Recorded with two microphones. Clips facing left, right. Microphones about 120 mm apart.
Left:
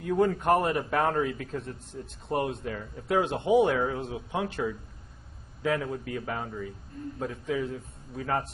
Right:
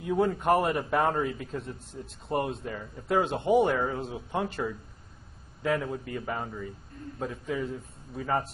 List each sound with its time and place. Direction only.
0.0 s speech: centre (ahead or behind)